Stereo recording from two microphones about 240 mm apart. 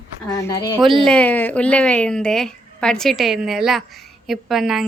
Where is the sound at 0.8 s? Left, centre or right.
Centre.